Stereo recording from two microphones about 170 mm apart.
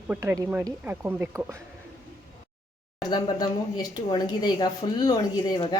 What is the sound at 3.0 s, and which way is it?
Speech, 25° left (ahead or behind).